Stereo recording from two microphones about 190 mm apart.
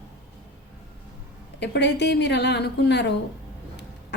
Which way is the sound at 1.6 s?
65° left (ahead or behind).